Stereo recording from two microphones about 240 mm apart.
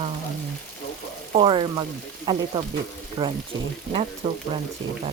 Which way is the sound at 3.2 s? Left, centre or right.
Right.